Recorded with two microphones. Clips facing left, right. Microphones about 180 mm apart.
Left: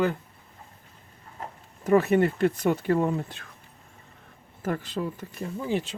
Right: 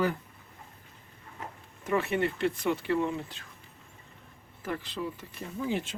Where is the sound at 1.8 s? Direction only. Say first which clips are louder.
Left 8 dB; 40° left (ahead or behind).